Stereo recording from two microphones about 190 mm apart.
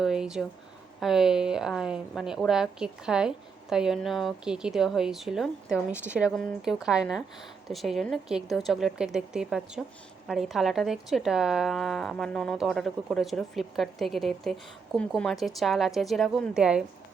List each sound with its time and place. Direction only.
0.0 s speech: 5° right (ahead or behind)